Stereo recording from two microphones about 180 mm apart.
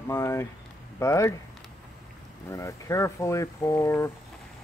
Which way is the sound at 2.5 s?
15° left (ahead or behind).